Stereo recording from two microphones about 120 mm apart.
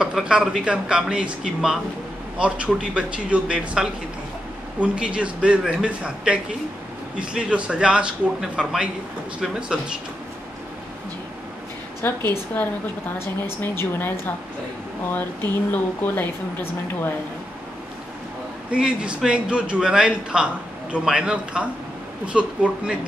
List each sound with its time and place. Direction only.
0.0 s a man's voice: 5° right (ahead or behind)
12.3 s a woman's voice: 15° left (ahead or behind)
15.7 s a woman's voice: 15° left (ahead or behind)
18.7 s a man's voice: 10° right (ahead or behind)